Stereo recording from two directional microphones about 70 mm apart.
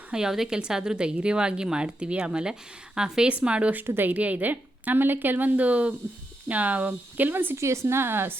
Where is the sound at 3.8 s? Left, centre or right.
Right.